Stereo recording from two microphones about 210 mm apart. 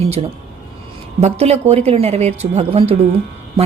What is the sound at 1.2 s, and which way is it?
A woman's voice, 30° right (ahead or behind).